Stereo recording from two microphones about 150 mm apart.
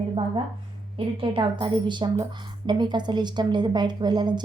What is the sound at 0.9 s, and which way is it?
A woman's voice, 35° right (ahead or behind).